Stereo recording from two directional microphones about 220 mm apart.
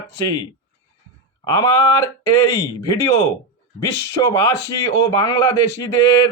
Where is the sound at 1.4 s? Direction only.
15° left (ahead or behind).